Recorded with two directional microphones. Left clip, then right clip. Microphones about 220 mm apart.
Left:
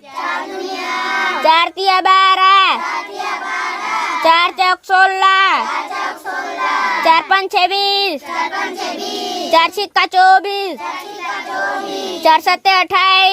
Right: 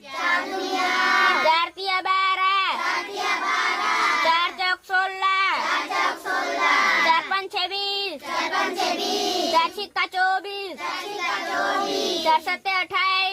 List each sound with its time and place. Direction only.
1.3 s a sound: 45° left (ahead or behind)
4.3 s a child's voice: 50° left (ahead or behind)
7.1 s a woman's voice: 45° left (ahead or behind)
9.6 s a woman's voice: 50° left (ahead or behind)
12.2 s a woman's voice: 50° left (ahead or behind)